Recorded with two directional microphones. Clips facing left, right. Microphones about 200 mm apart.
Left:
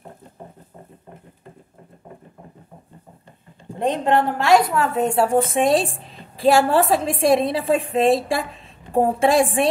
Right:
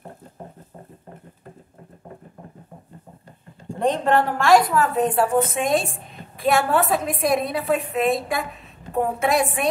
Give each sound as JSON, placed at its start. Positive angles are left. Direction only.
{"t": 4.0, "sound": "a woman's voice", "side_deg": 20}